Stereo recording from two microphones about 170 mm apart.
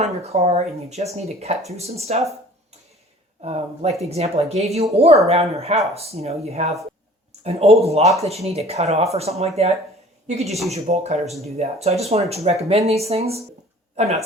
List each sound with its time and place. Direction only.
0.0 s speech: 40° right (ahead or behind)
3.4 s speech: 40° right (ahead or behind)
10.5 s speech: centre (ahead or behind)
10.8 s speech: 40° right (ahead or behind)